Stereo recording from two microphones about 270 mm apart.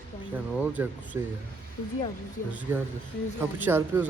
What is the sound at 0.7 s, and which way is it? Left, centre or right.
Speech, centre.